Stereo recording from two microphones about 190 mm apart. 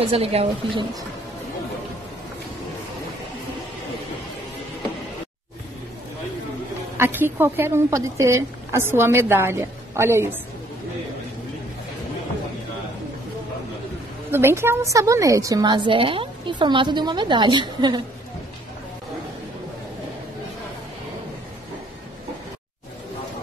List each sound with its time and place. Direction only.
0.0 s a woman's voice: 30° right (ahead or behind)
7.0 s a woman's voice: 10° right (ahead or behind)
14.3 s a woman's voice: 10° right (ahead or behind)